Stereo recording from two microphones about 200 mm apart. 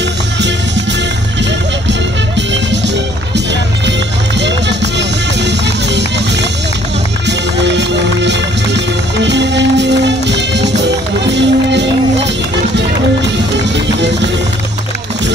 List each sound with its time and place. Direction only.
4.4 s music: 60° right (ahead or behind)
7.2 s music: 60° right (ahead or behind)